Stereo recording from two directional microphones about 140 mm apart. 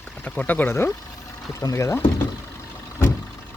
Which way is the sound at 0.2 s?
10° left (ahead or behind).